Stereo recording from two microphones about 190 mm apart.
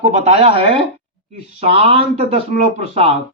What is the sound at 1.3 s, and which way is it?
Speech, 60° left (ahead or behind).